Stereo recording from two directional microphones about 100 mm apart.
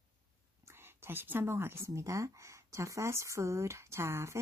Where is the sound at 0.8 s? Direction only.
25° right (ahead or behind).